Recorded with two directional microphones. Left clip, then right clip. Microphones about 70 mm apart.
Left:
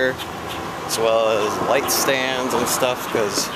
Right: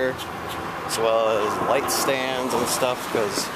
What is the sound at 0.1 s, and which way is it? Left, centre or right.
Vehicle, left.